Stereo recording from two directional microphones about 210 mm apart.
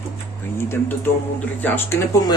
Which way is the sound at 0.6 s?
10° left (ahead or behind).